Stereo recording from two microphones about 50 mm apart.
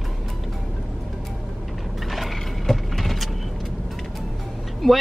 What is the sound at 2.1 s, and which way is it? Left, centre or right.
Mechanisms, centre.